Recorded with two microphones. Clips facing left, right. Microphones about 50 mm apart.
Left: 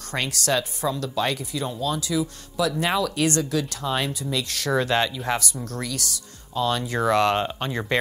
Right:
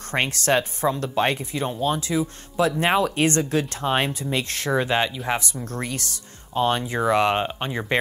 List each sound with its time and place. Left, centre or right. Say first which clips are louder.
0.1 s speech: right 3 dB; right
5.7 s speech: right 2 dB; right
6.8 s speech: even; centre